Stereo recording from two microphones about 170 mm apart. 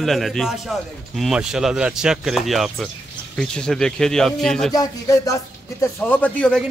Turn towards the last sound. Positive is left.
turn(degrees=10)  # may be behind; listen again after turning